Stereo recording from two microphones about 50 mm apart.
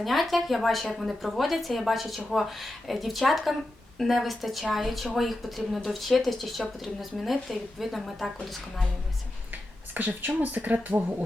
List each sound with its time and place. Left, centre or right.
0.0 s speech: centre
9.9 s speech: right